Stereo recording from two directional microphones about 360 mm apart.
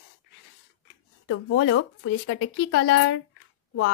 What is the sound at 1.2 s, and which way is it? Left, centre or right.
Speech, left.